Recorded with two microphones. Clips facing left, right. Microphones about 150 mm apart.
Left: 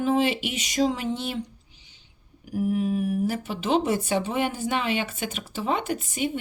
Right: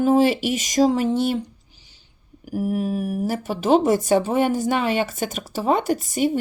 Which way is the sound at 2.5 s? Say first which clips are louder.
Right 1 dB; 45° right (ahead or behind).